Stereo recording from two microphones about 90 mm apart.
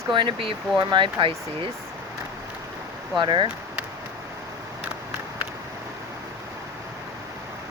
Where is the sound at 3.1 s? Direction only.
60° right (ahead or behind).